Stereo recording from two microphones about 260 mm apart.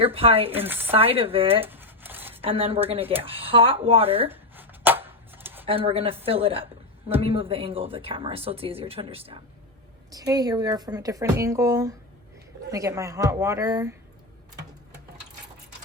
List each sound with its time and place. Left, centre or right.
0.0 s speech: right
0.6 s speech: centre
0.9 s speech: right
1.6 s a sound: centre
2.4 s speech: right
4.3 s shuffling cards: centre
5.6 s speech: right